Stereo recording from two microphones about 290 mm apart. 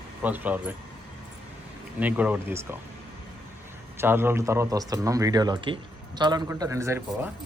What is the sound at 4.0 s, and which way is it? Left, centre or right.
A man's voice, centre.